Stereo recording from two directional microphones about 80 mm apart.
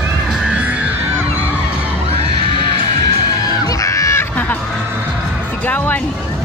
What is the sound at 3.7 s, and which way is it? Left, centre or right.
Crowd, left.